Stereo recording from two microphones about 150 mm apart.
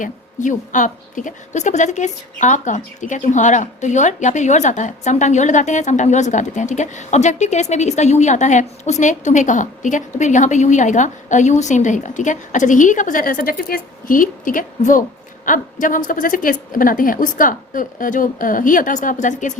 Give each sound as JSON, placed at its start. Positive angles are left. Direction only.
{"t": 0.0, "sound": "a woman's voice", "side_deg": 60}